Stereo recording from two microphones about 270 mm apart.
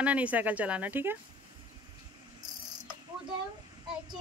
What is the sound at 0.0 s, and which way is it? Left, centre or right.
Speech, centre.